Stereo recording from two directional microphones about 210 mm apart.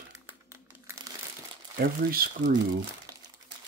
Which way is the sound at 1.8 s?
45° right (ahead or behind).